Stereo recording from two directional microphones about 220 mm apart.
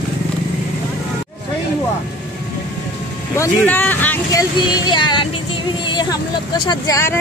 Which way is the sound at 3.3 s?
10° left (ahead or behind).